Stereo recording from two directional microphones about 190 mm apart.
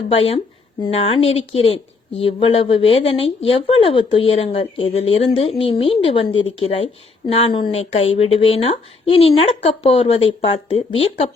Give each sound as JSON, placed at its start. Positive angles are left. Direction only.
{"t": 0.1, "sound": "a woman's voice", "side_deg": 30}